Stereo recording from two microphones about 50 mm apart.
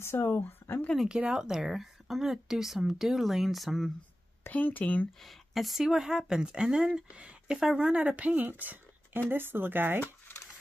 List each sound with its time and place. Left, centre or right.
0.0 s speech: left
1.0 s speech: centre
4.5 s speech: left
5.2 s speech: centre; by 8.5 s right
8.5 s a sound: right
9.3 s speech: right